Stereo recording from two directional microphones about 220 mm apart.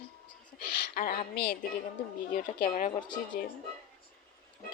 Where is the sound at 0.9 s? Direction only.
45° left (ahead or behind).